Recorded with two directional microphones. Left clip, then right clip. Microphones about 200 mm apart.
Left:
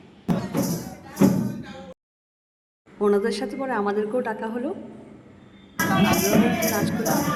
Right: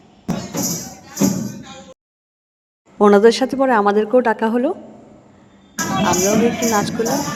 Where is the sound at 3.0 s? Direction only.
40° right (ahead or behind).